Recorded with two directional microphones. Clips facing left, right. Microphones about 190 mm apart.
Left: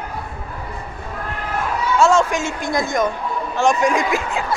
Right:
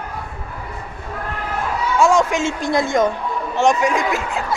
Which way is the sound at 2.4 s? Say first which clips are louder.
Right 3 dB; 25° right (ahead or behind).